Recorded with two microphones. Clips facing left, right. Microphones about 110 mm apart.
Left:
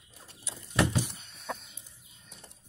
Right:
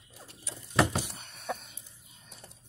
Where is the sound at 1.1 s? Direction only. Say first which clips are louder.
Right 4 dB; 65° right (ahead or behind).